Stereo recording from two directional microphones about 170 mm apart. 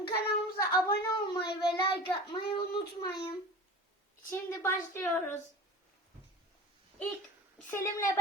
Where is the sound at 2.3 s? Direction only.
30° left (ahead or behind).